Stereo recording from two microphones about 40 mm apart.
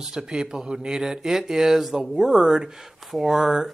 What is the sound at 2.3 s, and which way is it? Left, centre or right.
Speech, centre.